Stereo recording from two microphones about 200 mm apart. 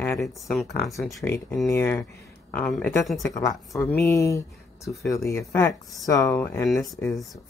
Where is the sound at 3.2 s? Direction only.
15° left (ahead or behind).